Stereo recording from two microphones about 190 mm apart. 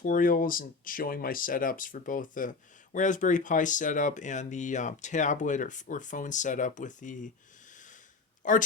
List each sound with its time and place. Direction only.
0.0 s speech: 45° left (ahead or behind)
7.7 s snort: 40° left (ahead or behind)
8.4 s speech: 45° left (ahead or behind)